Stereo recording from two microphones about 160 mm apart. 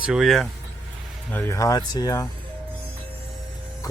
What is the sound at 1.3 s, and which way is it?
Speech, 15° left (ahead or behind).